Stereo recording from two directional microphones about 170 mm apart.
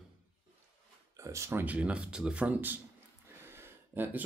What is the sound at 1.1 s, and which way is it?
Speech, 15° right (ahead or behind).